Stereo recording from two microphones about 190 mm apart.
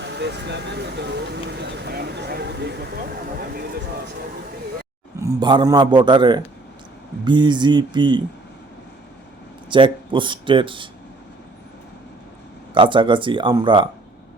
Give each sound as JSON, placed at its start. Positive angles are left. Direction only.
{"t": 0.0, "sound": "speech", "side_deg": -65}
{"t": 5.2, "sound": "a man's voice", "side_deg": -25}
{"t": 9.6, "sound": "a man's voice", "side_deg": -25}
{"t": 12.7, "sound": "a man's voice", "side_deg": -25}